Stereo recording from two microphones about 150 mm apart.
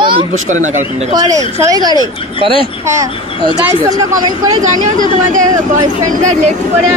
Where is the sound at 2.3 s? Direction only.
35° right (ahead or behind).